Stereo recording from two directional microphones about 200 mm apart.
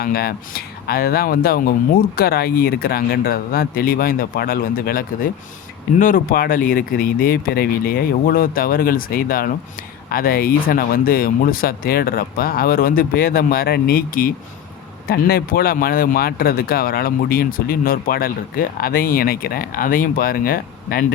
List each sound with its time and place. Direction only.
0.0 s speech: 50° left (ahead or behind)